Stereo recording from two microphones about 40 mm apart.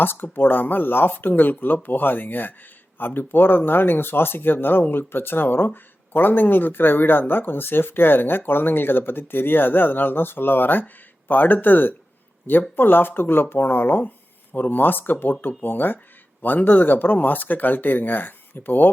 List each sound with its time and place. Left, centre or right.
0.0 s speech: left